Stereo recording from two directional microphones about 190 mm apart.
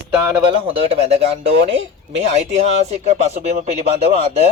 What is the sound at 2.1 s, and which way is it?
Speech, 35° right (ahead or behind).